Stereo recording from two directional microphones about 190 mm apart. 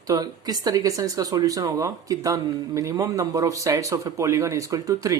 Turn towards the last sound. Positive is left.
turn(degrees=-20)  # may be behind; listen again after turning